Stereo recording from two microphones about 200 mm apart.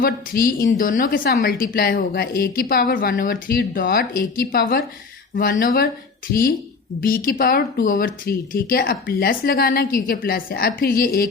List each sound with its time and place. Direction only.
0.0 s a woman's voice: 45° left (ahead or behind)